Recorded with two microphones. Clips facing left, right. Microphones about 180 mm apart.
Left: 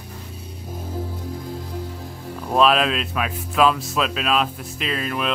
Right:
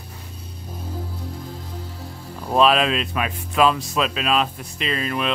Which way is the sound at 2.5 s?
Centre (ahead or behind).